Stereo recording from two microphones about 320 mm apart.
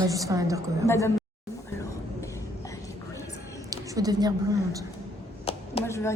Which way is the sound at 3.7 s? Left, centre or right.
Centre.